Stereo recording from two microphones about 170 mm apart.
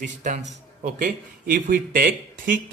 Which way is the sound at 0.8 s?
55° right (ahead or behind).